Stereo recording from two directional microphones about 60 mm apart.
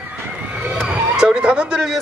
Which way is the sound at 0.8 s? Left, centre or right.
Centre.